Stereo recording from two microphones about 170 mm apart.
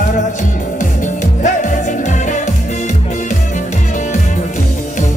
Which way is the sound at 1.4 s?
45° left (ahead or behind).